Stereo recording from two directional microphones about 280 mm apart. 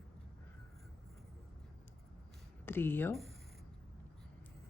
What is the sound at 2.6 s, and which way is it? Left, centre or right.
Speech, centre.